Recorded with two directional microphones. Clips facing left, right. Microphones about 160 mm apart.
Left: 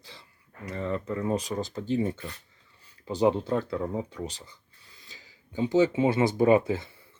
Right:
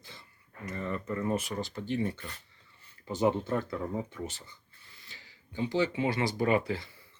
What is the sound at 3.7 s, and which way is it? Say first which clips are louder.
Speech: left 4 dB; 15° left (ahead or behind).